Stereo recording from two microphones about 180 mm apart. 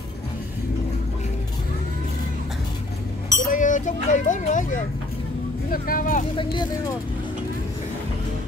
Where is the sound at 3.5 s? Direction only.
45° left (ahead or behind).